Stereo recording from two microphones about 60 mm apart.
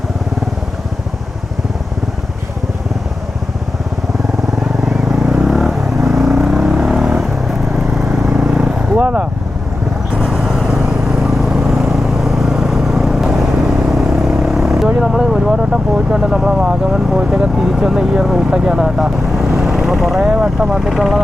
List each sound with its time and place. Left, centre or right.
4.6 s vehicle: centre
9.0 s vehicle: right
10.4 s vehicle: centre
11.3 s vehicle: centre
14.8 s vehicle: centre
20.1 s vehicle: centre
20.7 s vehicle: centre